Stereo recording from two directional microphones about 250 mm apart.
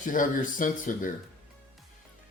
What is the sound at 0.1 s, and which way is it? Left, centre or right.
Speech, left.